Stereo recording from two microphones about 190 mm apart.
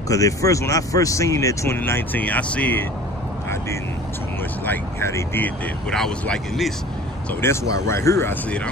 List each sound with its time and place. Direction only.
0.1 s speech: 15° left (ahead or behind)
4.6 s speech: 10° left (ahead or behind)
7.2 s speech: 15° left (ahead or behind)